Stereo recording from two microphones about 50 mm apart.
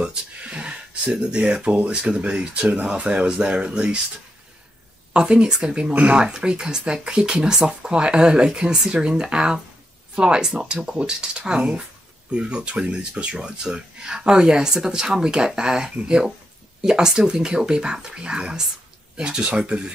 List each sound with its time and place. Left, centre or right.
0.0 s speech: right
5.1 s speech: centre